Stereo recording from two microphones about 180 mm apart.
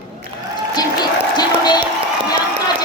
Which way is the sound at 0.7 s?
25° left (ahead or behind).